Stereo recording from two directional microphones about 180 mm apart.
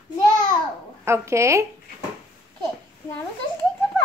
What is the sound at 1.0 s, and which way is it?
Speech, 15° right (ahead or behind).